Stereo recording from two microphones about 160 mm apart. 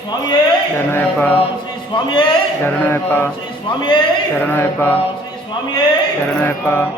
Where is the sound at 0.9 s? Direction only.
10° left (ahead or behind).